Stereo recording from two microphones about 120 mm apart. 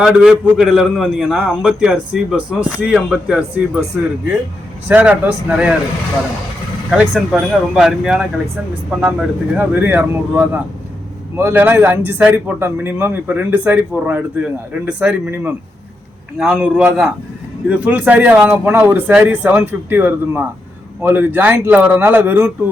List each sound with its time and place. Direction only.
0.0 s a man's voice: 5° right (ahead or behind)
4.9 s speech: 10° right (ahead or behind)
6.9 s a man's voice: 5° right (ahead or behind)